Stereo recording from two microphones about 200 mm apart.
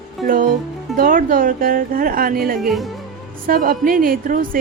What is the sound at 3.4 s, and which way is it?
A woman's voice, 45° right (ahead or behind).